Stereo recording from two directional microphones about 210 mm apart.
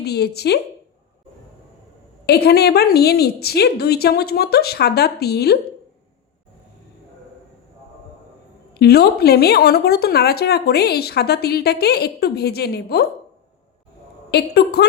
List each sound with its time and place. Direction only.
0.0 s a woman's voice: 50° left (ahead or behind)
2.2 s a woman's voice: 50° left (ahead or behind)
8.7 s a woman's voice: 50° left (ahead or behind)
14.3 s a woman's voice: 50° left (ahead or behind)